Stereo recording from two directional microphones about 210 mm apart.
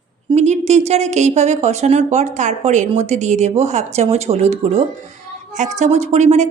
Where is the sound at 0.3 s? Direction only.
35° right (ahead or behind).